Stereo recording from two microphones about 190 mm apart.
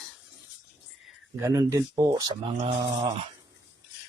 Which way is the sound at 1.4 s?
15° right (ahead or behind).